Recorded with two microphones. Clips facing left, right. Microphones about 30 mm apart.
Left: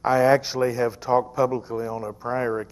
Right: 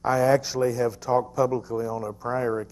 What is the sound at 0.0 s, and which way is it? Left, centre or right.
Speech, left.